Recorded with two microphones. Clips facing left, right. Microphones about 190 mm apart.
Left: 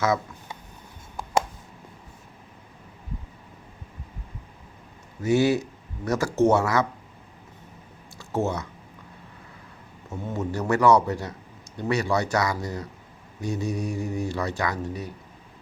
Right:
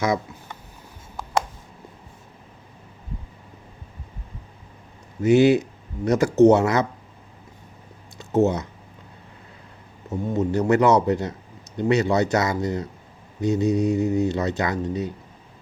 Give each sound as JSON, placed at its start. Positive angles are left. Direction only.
{"t": 5.2, "sound": "speech", "side_deg": -20}
{"t": 8.2, "sound": "speech", "side_deg": -20}
{"t": 10.1, "sound": "speech", "side_deg": -20}